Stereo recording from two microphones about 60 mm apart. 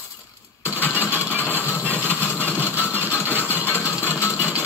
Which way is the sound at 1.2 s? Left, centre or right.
Right.